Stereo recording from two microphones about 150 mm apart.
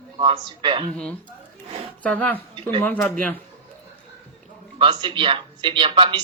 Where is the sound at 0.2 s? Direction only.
35° right (ahead or behind).